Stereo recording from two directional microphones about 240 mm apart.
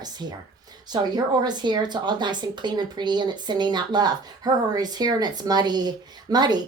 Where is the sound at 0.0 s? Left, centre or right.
Centre.